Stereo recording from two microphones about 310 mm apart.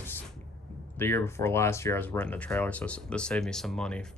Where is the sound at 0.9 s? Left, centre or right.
Centre.